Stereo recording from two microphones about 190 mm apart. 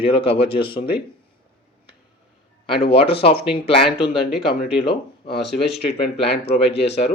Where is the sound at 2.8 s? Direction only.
30° left (ahead or behind).